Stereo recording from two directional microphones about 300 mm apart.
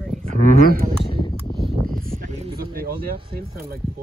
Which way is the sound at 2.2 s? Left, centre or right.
Right.